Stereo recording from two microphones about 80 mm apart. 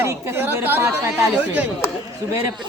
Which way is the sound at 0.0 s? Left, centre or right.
Right.